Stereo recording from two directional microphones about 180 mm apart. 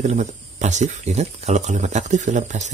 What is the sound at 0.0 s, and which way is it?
Speech, 40° right (ahead or behind).